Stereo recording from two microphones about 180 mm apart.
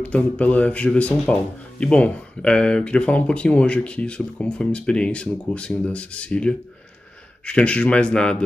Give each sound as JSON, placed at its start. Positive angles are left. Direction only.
{"t": 0.0, "sound": "speech", "side_deg": 10}